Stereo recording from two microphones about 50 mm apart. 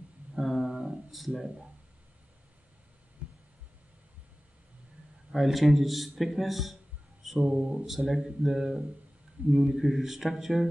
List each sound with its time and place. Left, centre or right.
0.4 s guitar: centre
3.2 s heart sounds: right
5.3 s a man's voice: centre